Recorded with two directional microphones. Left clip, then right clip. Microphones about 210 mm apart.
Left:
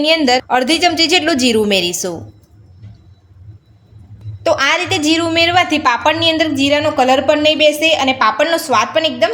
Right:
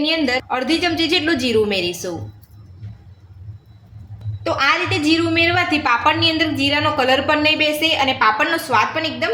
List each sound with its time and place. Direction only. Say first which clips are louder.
0.0 s a woman's voice: left 6 dB; 50° left (ahead or behind)
4.4 s a woman's voice: left 4 dB; 55° left (ahead or behind)